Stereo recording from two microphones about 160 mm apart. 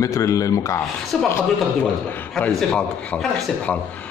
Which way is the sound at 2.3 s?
5° left (ahead or behind).